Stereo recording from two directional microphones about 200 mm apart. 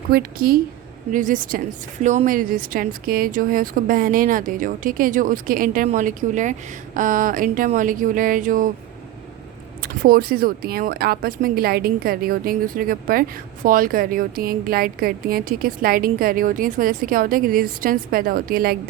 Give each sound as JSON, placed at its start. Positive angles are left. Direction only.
{"t": 0.1, "sound": "speech", "side_deg": -50}
{"t": 9.8, "sound": "speech", "side_deg": -45}